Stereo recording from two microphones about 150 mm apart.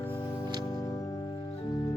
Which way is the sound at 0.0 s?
15° left (ahead or behind).